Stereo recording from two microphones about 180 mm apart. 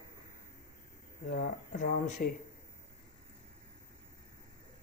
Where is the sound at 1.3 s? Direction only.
45° left (ahead or behind).